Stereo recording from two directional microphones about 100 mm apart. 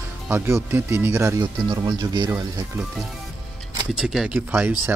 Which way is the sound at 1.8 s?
45° right (ahead or behind).